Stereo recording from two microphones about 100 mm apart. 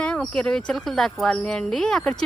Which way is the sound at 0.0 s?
10° left (ahead or behind).